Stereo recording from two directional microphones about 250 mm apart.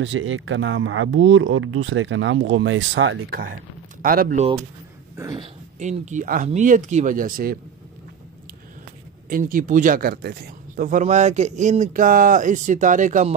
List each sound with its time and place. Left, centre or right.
0.0 s speech: right
4.0 s speech: right
5.1 s speech: centre; by 7.5 s right
9.3 s speech: right